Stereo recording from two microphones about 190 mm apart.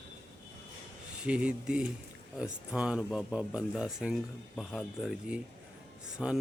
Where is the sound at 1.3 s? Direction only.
5° right (ahead or behind).